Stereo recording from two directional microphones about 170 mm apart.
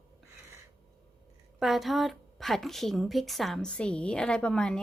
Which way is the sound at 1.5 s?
Centre (ahead or behind).